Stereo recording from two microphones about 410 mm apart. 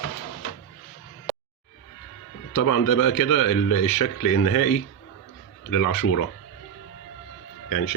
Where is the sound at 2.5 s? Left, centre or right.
Left.